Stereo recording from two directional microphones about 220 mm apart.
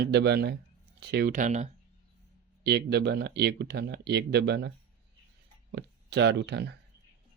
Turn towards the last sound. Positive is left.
turn(degrees=-50)  # may be behind; listen again after turning